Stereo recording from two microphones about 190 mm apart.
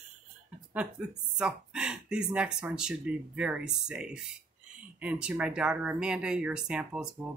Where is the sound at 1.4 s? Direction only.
5° right (ahead or behind).